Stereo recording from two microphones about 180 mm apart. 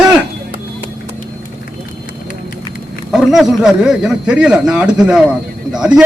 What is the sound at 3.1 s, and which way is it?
A man's voice, centre (ahead or behind).